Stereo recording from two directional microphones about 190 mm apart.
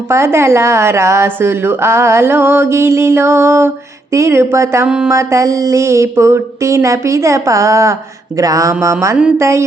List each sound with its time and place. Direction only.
0.1 s a woman's voice: 15° right (ahead or behind)
5.1 s a woman's voice: 15° right (ahead or behind)